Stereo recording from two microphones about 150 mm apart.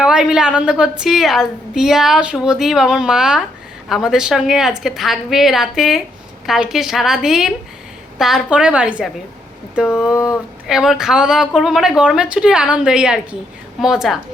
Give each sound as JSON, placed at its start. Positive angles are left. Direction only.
{"t": 0.0, "sound": "a woman's voice", "side_deg": -5}
{"t": 10.7, "sound": "a woman's voice", "side_deg": -5}